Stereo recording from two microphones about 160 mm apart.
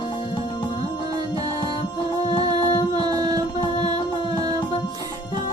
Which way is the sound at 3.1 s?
25° right (ahead or behind).